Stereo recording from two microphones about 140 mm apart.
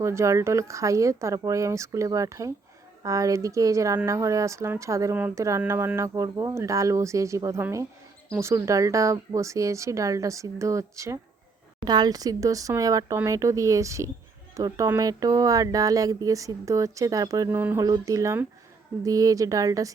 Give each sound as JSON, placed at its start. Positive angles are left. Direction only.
{"t": 0.0, "sound": "speech", "side_deg": -20}
{"t": 17.6, "sound": "speech", "side_deg": -15}
{"t": 17.8, "sound": "speech", "side_deg": -25}